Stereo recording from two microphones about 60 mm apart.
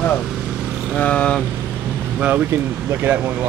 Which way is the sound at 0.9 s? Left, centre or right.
Centre.